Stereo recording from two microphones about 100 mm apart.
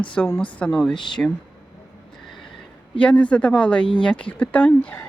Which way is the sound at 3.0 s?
15° left (ahead or behind).